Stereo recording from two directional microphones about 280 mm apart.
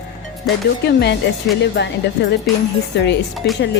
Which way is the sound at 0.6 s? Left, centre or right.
Left.